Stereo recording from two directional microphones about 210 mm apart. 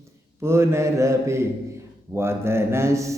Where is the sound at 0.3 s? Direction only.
10° right (ahead or behind).